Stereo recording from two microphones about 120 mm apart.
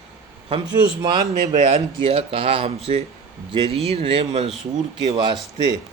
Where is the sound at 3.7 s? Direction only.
60° right (ahead or behind).